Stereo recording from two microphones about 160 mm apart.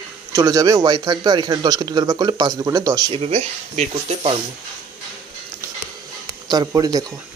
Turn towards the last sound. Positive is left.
turn(degrees=-25)  # may be behind; listen again after turning